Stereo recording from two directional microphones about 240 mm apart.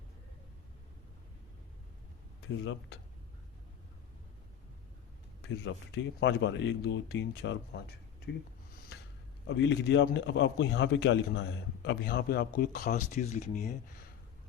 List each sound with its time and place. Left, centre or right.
5.6 s a man's voice: left
9.5 s a man's voice: left